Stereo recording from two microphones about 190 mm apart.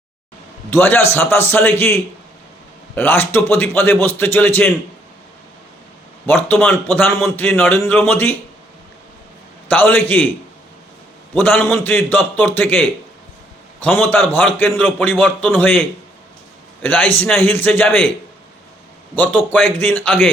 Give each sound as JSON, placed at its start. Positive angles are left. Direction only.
{"t": 0.7, "sound": "a man's voice", "side_deg": 10}
{"t": 6.2, "sound": "a man's voice", "side_deg": 10}
{"t": 9.6, "sound": "a man's voice", "side_deg": 10}
{"t": 11.3, "sound": "a man's voice", "side_deg": 10}
{"t": 16.8, "sound": "a man's voice", "side_deg": 10}
{"t": 19.1, "sound": "a man's voice", "side_deg": 10}